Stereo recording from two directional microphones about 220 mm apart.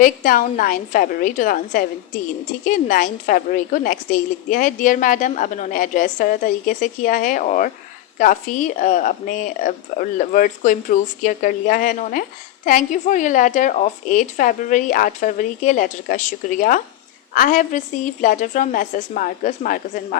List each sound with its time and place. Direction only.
0.0 s a woman's voice: 40° left (ahead or behind)